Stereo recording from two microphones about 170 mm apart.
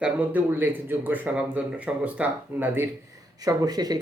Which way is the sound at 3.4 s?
25° right (ahead or behind).